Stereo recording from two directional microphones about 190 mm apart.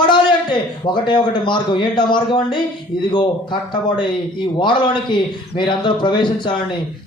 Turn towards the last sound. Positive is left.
turn(degrees=25)  # may be behind; listen again after turning